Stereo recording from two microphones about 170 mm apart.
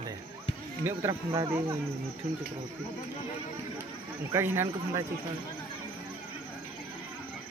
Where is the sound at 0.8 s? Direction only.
15° right (ahead or behind).